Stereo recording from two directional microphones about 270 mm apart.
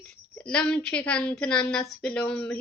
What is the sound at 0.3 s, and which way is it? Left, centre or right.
A woman's voice, centre.